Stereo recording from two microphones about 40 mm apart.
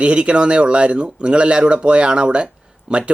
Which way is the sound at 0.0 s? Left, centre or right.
Right.